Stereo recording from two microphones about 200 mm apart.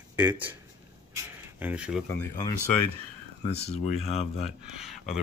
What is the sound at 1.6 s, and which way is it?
Speech, 5° right (ahead or behind).